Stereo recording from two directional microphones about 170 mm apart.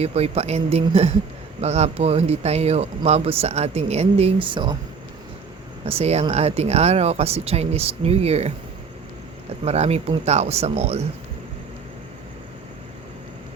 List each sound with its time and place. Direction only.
0.0 s speech: 35° right (ahead or behind)
5.8 s speech: 35° right (ahead or behind)
9.6 s speech: 40° right (ahead or behind)